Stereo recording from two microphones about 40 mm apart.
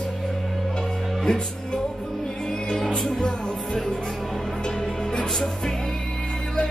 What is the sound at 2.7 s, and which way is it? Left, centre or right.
Music, centre.